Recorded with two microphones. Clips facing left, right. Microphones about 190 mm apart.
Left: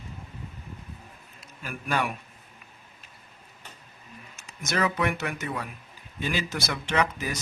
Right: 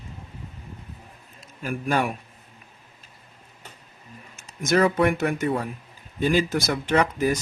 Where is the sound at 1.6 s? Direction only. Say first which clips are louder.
Right 5 dB; 45° right (ahead or behind).